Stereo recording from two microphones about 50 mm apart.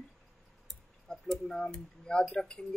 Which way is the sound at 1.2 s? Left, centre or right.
Centre.